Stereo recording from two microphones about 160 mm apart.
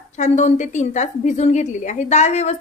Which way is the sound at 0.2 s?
50° left (ahead or behind).